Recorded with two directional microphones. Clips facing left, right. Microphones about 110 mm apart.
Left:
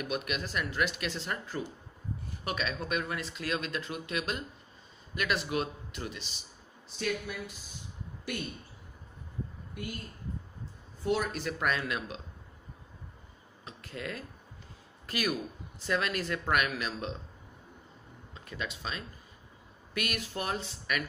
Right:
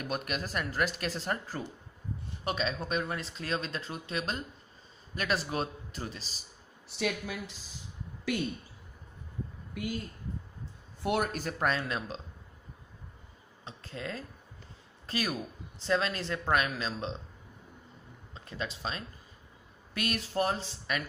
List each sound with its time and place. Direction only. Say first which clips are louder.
0.0 s speech: even; 40° right (ahead or behind)
2.4 s speech: right 2 dB; 30° right (ahead or behind)
6.9 s a woman's voice: right 1 dB; 85° right
11.0 s speech: even; 55° right (ahead or behind); by 12.2 s 30° right (ahead or behind)
13.7 s speech: even; 30° right (ahead or behind)
18.3 s speech: right 1 dB; 30° right (ahead or behind)